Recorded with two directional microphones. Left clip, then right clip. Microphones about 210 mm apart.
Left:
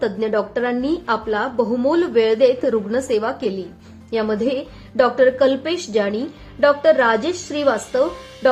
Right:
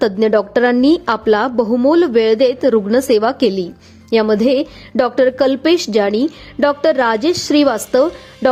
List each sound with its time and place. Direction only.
0.0 s a woman's voice: 45° right (ahead or behind)